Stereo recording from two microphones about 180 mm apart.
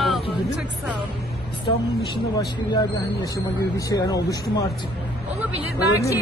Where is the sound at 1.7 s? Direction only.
25° left (ahead or behind).